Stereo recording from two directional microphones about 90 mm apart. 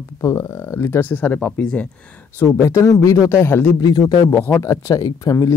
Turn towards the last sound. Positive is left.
turn(degrees=40)  # may be behind; listen again after turning